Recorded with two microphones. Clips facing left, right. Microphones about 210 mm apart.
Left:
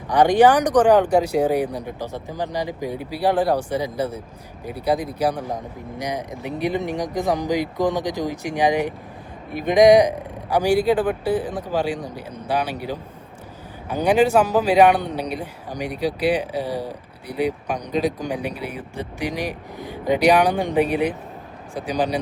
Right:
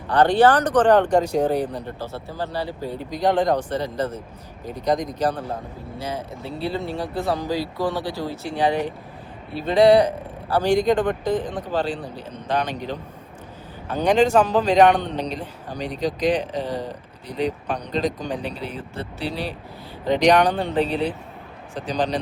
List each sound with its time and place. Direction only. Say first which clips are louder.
0.1 s a man's voice: left 2 dB; 15° left (ahead or behind)